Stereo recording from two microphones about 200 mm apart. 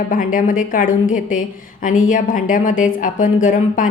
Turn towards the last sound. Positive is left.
turn(degrees=40)  # may be behind; listen again after turning